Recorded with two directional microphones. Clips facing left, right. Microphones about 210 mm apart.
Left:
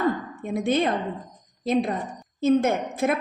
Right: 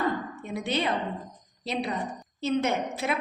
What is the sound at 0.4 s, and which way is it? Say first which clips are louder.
A woman's voice: left 7 dB; 50° left (ahead or behind).